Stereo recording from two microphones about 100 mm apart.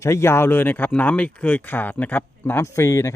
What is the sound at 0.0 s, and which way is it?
Speech, 25° left (ahead or behind).